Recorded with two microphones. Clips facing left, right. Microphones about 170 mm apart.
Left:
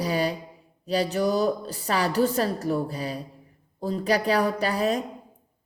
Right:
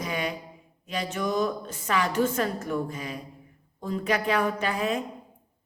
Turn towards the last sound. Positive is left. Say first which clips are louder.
# left 3 dB
turn(degrees=35)  # may be behind; listen again after turning